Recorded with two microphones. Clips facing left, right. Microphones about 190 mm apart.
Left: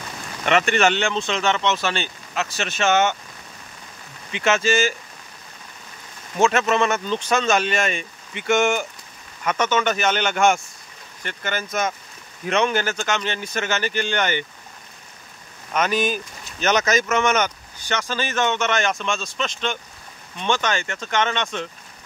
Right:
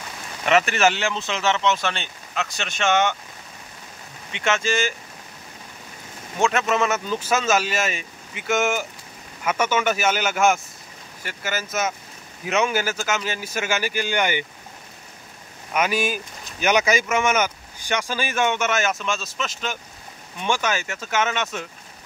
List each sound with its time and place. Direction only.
0.5 s speech: 5° right (ahead or behind)
4.3 s speech: 5° left (ahead or behind)
6.4 s speech: centre (ahead or behind)
15.7 s speech: 10° right (ahead or behind)